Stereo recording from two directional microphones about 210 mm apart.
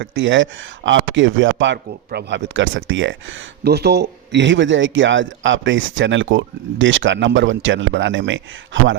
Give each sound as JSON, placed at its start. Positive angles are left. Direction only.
{"t": 0.0, "sound": "a man's voice", "side_deg": -65}
{"t": 3.6, "sound": "a man's voice", "side_deg": -50}